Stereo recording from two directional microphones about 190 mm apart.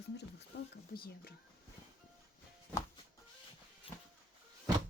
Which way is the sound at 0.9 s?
55° left (ahead or behind).